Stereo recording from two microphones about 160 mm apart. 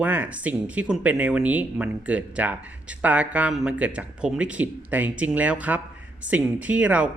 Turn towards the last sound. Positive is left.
turn(degrees=-10)  # may be behind; listen again after turning